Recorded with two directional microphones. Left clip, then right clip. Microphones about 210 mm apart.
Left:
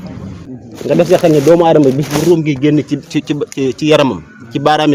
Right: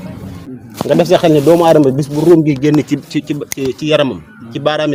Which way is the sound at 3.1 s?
20° left (ahead or behind).